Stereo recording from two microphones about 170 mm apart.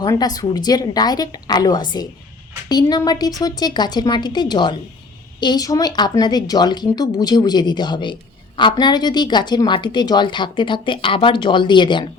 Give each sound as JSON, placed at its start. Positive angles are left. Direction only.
{"t": 0.0, "sound": "a woman's voice", "side_deg": 25}